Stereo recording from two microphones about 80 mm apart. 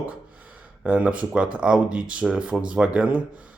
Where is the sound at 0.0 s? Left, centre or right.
Centre.